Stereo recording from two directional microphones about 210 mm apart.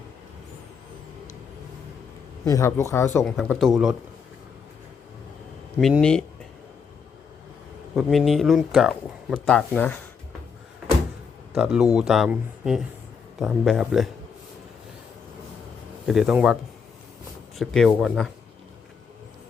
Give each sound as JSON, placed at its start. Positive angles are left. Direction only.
{"t": 2.5, "sound": "speech", "side_deg": 15}
{"t": 3.3, "sound": "speech", "side_deg": 0}
{"t": 5.8, "sound": "speech", "side_deg": 5}
{"t": 7.9, "sound": "speech", "side_deg": 0}
{"t": 11.5, "sound": "speech", "side_deg": -5}
{"t": 16.0, "sound": "speech", "side_deg": -5}
{"t": 17.6, "sound": "speech", "side_deg": 0}